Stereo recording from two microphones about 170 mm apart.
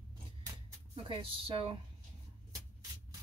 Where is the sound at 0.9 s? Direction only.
30° right (ahead or behind).